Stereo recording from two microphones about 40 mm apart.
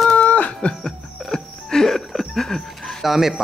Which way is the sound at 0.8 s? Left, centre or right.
Centre.